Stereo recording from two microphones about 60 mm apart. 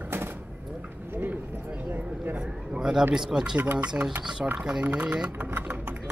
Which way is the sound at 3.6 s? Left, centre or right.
Right.